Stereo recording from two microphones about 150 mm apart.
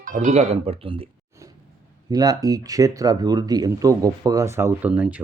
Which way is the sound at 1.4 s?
20° right (ahead or behind).